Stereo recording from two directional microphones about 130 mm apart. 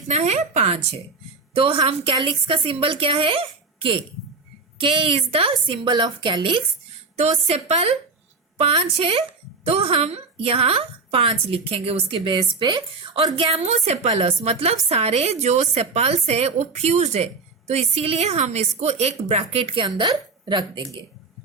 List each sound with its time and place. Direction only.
0.1 s a woman's voice: 60° right (ahead or behind); by 6.6 s 40° right (ahead or behind)
7.2 s a woman's voice: 55° right (ahead or behind); by 20.8 s 35° right (ahead or behind)